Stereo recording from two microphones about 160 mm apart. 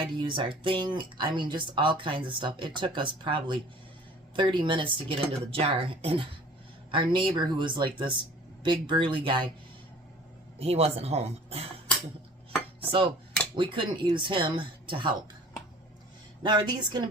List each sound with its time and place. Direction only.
0.2 s speech: 30° right (ahead or behind)
10.6 s speech: 40° right (ahead or behind)
12.9 s speech: 30° right (ahead or behind)
16.4 s speech: 25° right (ahead or behind)